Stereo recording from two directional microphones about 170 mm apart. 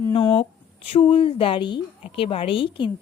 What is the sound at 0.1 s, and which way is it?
A woman's voice, 30° left (ahead or behind).